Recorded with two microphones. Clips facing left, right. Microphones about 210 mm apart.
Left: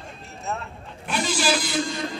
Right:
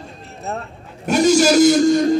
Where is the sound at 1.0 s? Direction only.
45° right (ahead or behind).